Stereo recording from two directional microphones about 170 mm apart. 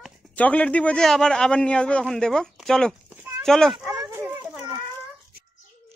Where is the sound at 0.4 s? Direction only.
10° left (ahead or behind).